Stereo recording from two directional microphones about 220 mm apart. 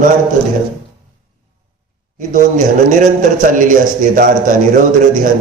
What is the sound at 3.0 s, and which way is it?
A man's voice, 35° right (ahead or behind).